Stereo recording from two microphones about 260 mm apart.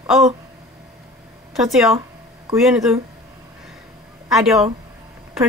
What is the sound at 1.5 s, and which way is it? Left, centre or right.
A woman's voice, centre.